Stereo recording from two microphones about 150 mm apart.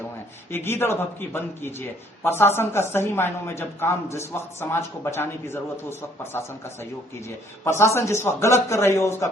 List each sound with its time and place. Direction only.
0.5 s a woman's voice: 15° left (ahead or behind)
7.6 s a woman's voice: 15° left (ahead or behind)